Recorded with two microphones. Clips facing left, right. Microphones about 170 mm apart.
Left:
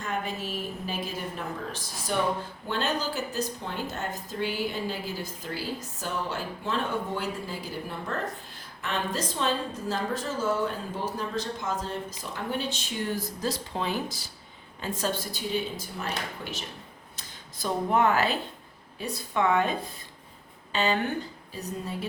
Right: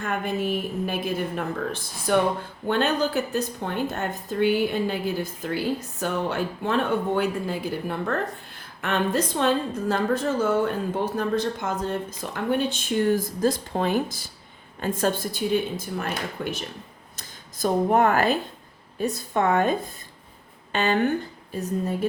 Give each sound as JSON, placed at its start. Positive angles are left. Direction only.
{"t": 0.0, "sound": "a woman's voice", "side_deg": -60}
{"t": 20.7, "sound": "a woman's voice", "side_deg": -55}